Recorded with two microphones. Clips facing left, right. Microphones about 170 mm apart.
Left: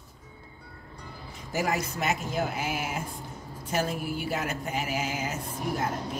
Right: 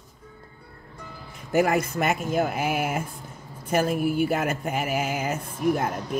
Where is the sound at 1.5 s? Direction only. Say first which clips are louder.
Right 7 dB; 55° right (ahead or behind).